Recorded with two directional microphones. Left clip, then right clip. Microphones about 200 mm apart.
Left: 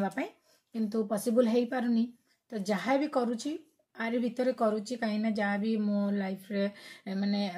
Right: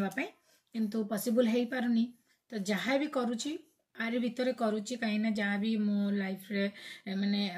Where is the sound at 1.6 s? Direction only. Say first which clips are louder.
Left 2 dB; centre (ahead or behind).